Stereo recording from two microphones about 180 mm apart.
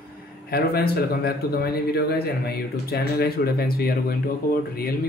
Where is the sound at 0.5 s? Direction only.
60° left (ahead or behind).